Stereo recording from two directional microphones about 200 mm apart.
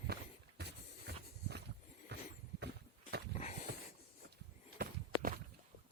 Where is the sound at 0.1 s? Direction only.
55° right (ahead or behind).